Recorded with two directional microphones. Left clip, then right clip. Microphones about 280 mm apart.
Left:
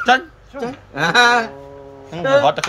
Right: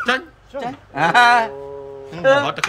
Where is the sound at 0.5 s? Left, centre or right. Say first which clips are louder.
Even; right.